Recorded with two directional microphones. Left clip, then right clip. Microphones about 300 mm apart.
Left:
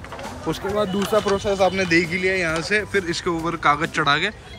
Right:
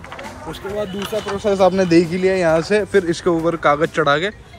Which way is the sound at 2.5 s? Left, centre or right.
Centre.